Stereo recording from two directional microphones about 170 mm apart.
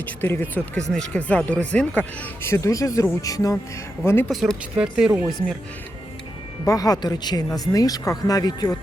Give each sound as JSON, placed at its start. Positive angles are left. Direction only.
{"t": 0.0, "sound": "speech", "side_deg": 10}
{"t": 4.3, "sound": "speech", "side_deg": 0}
{"t": 6.7, "sound": "speech", "side_deg": 20}